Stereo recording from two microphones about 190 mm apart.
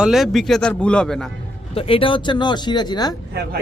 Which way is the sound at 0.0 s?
Centre (ahead or behind).